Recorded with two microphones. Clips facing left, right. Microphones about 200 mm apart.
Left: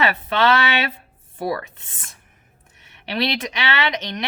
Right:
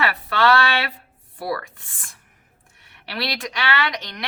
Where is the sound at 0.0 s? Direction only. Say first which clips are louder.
Left 1 dB; 20° left (ahead or behind).